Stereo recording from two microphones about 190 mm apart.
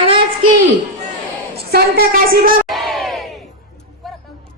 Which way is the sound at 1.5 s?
55° right (ahead or behind).